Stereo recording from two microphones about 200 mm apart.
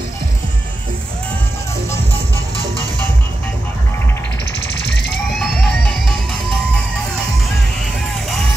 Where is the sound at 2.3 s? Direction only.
15° right (ahead or behind).